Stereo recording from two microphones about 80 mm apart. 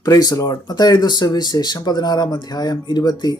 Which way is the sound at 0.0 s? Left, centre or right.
Left.